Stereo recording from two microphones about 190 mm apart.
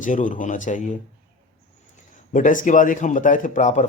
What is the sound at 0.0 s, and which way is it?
Speech, 40° left (ahead or behind).